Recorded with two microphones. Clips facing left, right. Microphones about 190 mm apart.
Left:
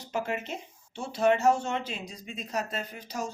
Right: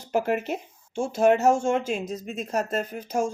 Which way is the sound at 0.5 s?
50° right (ahead or behind).